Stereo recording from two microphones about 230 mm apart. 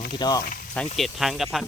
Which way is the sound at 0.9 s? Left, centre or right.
Centre.